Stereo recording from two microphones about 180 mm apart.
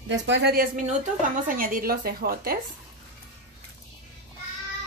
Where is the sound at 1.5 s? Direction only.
50° right (ahead or behind).